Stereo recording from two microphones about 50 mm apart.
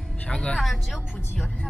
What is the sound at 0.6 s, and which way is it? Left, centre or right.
Speech, centre.